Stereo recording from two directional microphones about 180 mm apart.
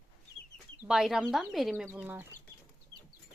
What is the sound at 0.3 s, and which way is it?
Chicken, 80° left.